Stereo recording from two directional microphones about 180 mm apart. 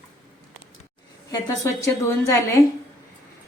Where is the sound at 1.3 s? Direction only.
15° left (ahead or behind).